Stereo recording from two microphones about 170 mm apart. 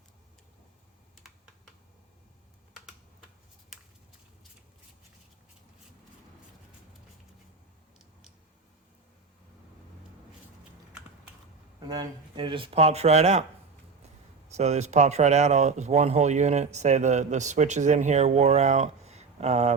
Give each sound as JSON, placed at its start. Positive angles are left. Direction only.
{"t": 11.8, "sound": "speech", "side_deg": -25}
{"t": 14.5, "sound": "speech", "side_deg": -40}